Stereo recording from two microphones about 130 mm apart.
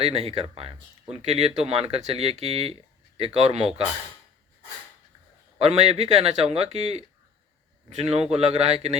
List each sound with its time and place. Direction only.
0.0 s speech: 50° right (ahead or behind)
5.5 s speech: 50° right (ahead or behind)
8.0 s speech: 50° right (ahead or behind)